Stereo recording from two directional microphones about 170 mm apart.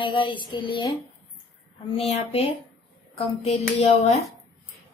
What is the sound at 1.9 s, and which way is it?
Speech, 35° left (ahead or behind).